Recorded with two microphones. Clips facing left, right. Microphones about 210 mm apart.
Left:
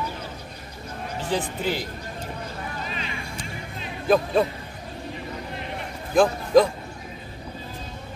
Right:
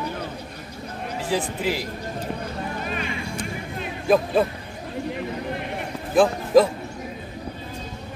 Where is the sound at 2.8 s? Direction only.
55° right (ahead or behind).